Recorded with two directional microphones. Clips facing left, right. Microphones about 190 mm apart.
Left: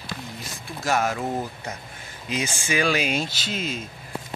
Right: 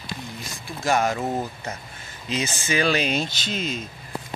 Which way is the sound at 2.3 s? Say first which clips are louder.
Right 1 dB; 10° left (ahead or behind).